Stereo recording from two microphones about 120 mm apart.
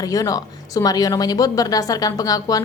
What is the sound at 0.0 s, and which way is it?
A woman's voice, 30° left (ahead or behind).